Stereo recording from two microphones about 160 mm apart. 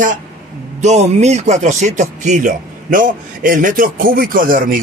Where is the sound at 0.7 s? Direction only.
45° right (ahead or behind).